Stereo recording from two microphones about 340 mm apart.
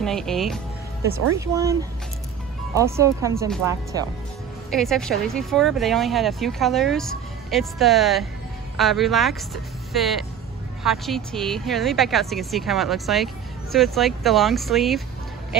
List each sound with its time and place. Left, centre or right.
0.0 s speech: centre
4.6 s speech: centre